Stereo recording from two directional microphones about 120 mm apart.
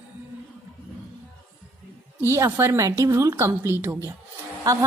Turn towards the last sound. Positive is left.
turn(degrees=-25)  # may be behind; listen again after turning